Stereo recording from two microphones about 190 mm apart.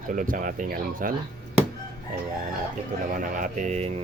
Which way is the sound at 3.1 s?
45° right (ahead or behind).